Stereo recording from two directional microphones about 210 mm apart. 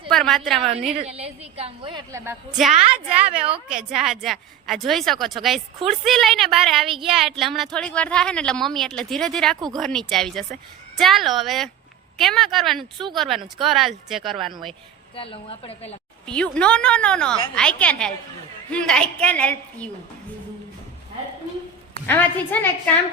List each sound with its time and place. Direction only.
0.1 s a woman's voice: centre (ahead or behind)
0.9 s a woman's voice: 30° right (ahead or behind)
2.2 s a woman's voice: 5° right (ahead or behind)
15.1 s a woman's voice: 25° left (ahead or behind)
16.2 s a woman's voice: 5° left (ahead or behind)
22.0 s a woman's voice: 10° left (ahead or behind)